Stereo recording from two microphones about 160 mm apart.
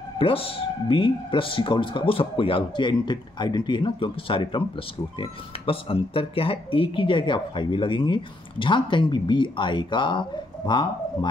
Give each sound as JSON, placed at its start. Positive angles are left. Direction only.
{"t": 0.2, "sound": "speech", "side_deg": 35}